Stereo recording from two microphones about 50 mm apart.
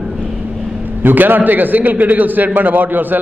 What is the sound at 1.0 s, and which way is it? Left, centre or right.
A man's voice, right.